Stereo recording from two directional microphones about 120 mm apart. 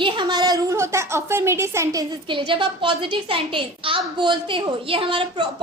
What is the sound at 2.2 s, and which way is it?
A woman's voice, 45° right (ahead or behind).